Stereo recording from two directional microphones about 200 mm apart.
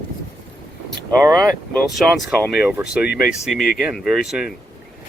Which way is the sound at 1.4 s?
Centre (ahead or behind).